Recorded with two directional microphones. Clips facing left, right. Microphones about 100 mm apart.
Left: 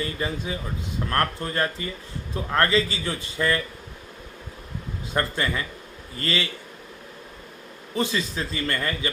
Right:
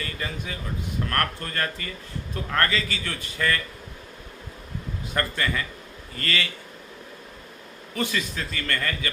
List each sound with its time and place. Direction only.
0.0 s a man's voice: 25° left (ahead or behind)
5.1 s a man's voice: 25° left (ahead or behind)
7.9 s a man's voice: 25° left (ahead or behind)